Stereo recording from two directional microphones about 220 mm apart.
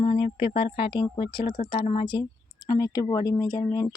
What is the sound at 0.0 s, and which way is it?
Speech, 20° left (ahead or behind).